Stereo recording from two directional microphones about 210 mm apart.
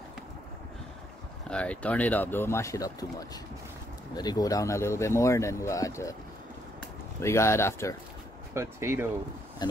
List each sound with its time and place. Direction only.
1.5 s speech: 5° left (ahead or behind)
7.2 s speech: 15° left (ahead or behind)
8.5 s speech: 10° right (ahead or behind)
9.6 s speech: 20° left (ahead or behind)